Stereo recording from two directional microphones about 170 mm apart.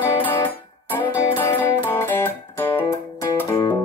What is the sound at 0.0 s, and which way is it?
Music, 10° left (ahead or behind).